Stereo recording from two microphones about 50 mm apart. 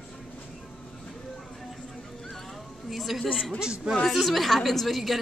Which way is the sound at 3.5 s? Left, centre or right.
Centre.